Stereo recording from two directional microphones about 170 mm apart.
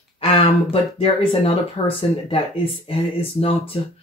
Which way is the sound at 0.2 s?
35° left (ahead or behind).